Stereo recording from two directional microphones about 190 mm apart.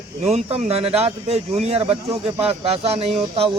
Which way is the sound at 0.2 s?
35° right (ahead or behind).